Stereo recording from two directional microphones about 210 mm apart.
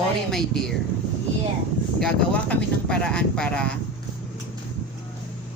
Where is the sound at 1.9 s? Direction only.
5° left (ahead or behind).